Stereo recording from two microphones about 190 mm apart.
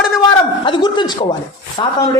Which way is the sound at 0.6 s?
25° left (ahead or behind).